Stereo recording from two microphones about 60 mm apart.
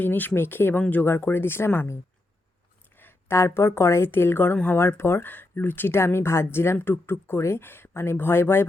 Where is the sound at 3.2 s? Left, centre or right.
Left.